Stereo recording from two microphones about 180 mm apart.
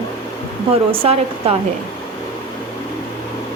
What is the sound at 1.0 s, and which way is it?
Speech, 35° right (ahead or behind).